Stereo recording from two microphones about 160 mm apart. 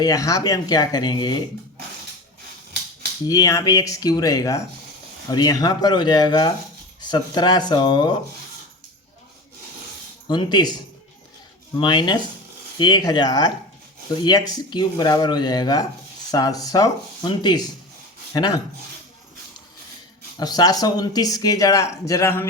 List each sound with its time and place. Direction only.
0.0 s speech: 20° left (ahead or behind)
3.2 s speech: 20° left (ahead or behind)
10.2 s speech: 25° left (ahead or behind)
11.8 s speech: 30° left (ahead or behind)
20.4 s speech: 25° left (ahead or behind)